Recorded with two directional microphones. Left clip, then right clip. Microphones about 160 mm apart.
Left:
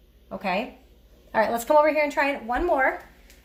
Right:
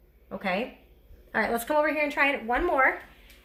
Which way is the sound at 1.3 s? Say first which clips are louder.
Left 6 dB; 20° left (ahead or behind).